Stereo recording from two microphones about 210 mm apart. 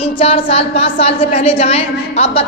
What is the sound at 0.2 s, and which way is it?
A woman's voice, 25° left (ahead or behind).